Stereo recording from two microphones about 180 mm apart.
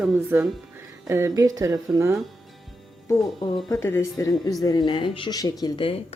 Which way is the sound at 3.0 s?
20° left (ahead or behind).